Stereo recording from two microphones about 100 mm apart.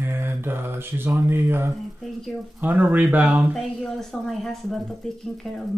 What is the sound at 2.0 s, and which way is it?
Speech, centre (ahead or behind).